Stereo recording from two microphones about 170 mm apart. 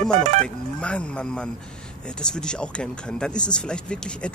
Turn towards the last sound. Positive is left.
turn(degrees=5)  # may be behind; listen again after turning